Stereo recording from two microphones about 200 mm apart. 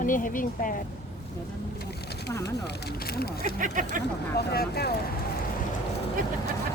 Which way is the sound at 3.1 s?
50° left (ahead or behind).